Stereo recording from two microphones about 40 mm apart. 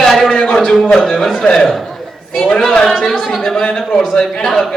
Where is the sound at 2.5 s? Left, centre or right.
Centre.